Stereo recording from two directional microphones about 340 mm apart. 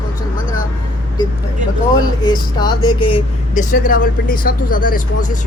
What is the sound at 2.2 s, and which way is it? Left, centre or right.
Speech, centre.